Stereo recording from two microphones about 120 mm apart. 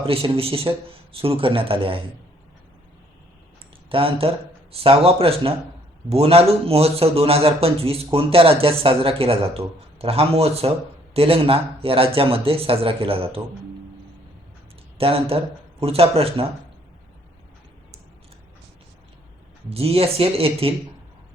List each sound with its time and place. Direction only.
0.0 s speech: 50° right (ahead or behind)
3.8 s a man's voice: 50° right (ahead or behind)
14.9 s speech: 55° right (ahead or behind)
19.7 s speech: 55° right (ahead or behind)